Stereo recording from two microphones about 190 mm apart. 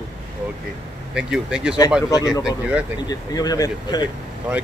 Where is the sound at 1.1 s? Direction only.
5° right (ahead or behind).